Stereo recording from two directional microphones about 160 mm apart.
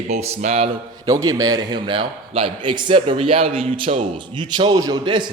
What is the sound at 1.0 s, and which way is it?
A man's voice, 20° right (ahead or behind).